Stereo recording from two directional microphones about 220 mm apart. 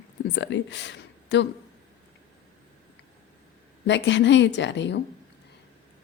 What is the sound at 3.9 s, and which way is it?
Speech, 55° left (ahead or behind).